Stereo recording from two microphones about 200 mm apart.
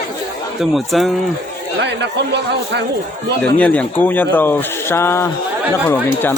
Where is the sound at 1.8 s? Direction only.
60° right (ahead or behind).